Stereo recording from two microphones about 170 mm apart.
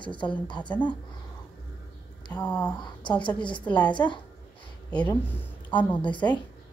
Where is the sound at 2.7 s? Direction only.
25° left (ahead or behind).